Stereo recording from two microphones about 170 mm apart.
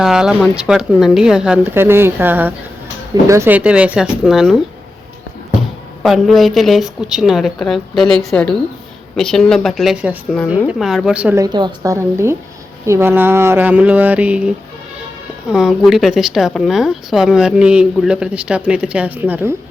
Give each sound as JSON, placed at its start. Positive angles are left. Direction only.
{"t": 0.0, "sound": "speech", "side_deg": -5}
{"t": 6.0, "sound": "speech", "side_deg": 0}
{"t": 11.4, "sound": "a woman's voice", "side_deg": -25}